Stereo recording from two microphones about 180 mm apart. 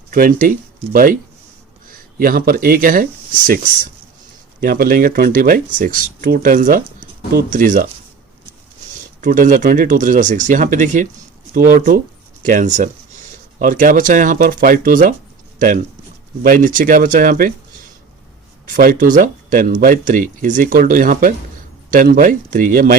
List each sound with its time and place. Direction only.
0.1 s speech: 50° right (ahead or behind)
1.9 s speech: 50° right (ahead or behind)
9.2 s speech: 45° right (ahead or behind)
18.7 s speech: 50° right (ahead or behind)